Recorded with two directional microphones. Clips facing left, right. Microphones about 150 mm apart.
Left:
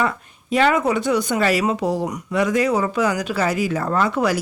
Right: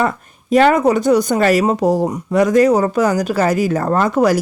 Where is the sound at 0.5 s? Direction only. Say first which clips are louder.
Right 6 dB; 45° right (ahead or behind).